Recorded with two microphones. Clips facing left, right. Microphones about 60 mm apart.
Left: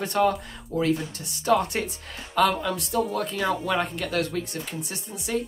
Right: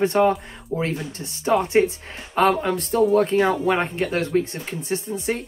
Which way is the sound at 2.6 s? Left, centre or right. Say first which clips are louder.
Right 6 dB; right.